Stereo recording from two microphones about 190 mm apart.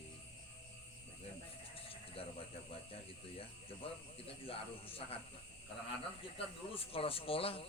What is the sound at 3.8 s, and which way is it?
A man's voice, 30° left (ahead or behind).